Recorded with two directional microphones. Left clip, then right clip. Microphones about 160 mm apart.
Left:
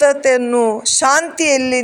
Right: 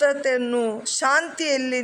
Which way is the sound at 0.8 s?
20° left (ahead or behind).